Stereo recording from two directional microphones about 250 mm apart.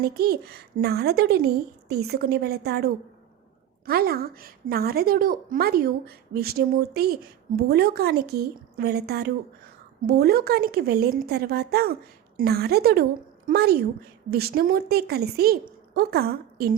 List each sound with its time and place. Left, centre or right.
0.0 s a woman's voice: right